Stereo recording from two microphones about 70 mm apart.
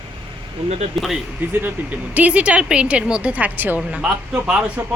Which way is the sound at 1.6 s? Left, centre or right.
Right.